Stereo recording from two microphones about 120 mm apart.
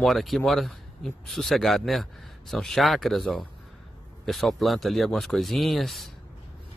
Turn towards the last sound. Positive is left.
turn(degrees=0)  # may be behind; listen again after turning